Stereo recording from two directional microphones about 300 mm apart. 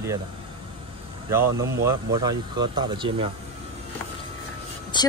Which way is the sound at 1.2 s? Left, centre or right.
Centre.